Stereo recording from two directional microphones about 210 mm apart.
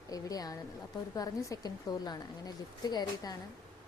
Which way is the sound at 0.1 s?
15° left (ahead or behind).